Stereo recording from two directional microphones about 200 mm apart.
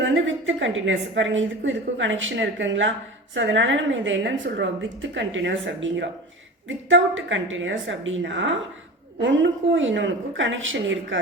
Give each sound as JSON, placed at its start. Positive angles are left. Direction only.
{"t": 0.0, "sound": "a woman's voice", "side_deg": -70}